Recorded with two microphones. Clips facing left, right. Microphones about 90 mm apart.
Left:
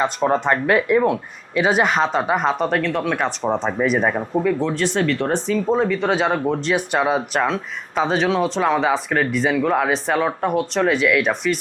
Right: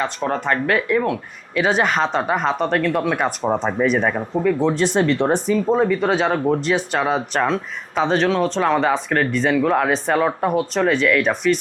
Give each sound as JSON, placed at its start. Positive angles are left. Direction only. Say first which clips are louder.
{"t": 0.0, "sound": "speech", "louder": "left 3 dB", "side_deg": 20}
{"t": 4.6, "sound": "speech", "louder": "right 3 dB", "side_deg": -20}
{"t": 5.5, "sound": "speech", "louder": "right 1 dB", "side_deg": -5}
{"t": 6.7, "sound": "speech", "louder": "left 1 dB", "side_deg": 10}